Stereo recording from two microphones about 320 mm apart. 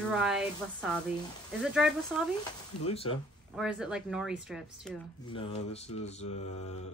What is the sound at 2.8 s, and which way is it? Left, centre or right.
Speech, centre.